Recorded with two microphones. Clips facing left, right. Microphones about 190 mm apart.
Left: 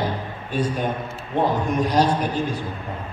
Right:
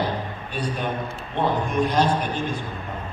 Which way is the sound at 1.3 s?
40° left (ahead or behind).